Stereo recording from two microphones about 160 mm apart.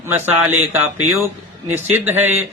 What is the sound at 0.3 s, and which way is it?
A man's voice, 15° right (ahead or behind).